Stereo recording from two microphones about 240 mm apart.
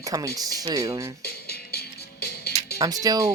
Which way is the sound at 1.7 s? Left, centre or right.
Left.